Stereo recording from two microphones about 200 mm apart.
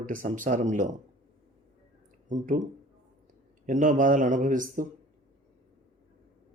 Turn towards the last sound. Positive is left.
turn(degrees=-40)  # may be behind; listen again after turning